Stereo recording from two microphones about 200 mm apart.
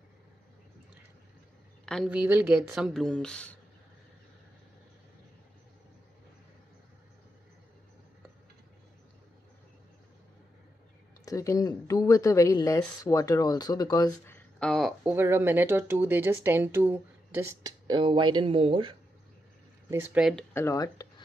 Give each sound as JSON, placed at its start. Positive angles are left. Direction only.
{"t": 2.0, "sound": "speech", "side_deg": -10}
{"t": 11.2, "sound": "a woman's voice", "side_deg": 15}
{"t": 15.1, "sound": "speech", "side_deg": -10}
{"t": 19.9, "sound": "speech", "side_deg": -10}
{"t": 20.5, "sound": "a woman's voice", "side_deg": 15}